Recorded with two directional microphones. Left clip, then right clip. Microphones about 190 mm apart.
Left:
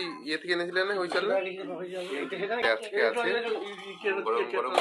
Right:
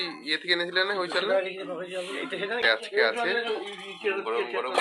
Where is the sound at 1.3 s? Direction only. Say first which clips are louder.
Right 3 dB; 30° right (ahead or behind).